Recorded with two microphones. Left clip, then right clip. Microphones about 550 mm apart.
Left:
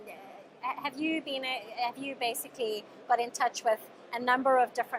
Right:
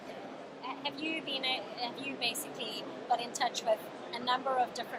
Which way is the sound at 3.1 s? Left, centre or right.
Left.